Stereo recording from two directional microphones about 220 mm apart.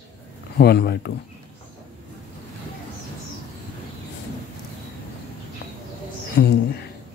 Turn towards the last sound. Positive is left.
turn(degrees=45)  # may be behind; listen again after turning